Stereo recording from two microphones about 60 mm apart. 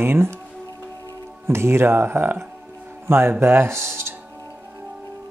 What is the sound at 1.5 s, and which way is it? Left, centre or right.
Speech, right.